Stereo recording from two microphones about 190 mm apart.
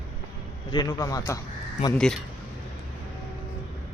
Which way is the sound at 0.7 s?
20° left (ahead or behind).